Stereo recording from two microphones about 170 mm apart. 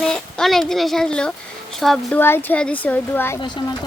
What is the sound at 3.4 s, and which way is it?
Speech, 25° left (ahead or behind).